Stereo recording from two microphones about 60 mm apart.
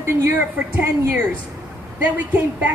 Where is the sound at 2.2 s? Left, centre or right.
Right.